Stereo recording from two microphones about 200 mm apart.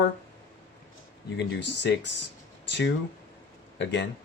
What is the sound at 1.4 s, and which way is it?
Speech, 60° left (ahead or behind).